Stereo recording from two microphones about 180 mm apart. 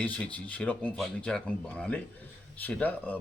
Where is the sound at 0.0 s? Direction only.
5° left (ahead or behind).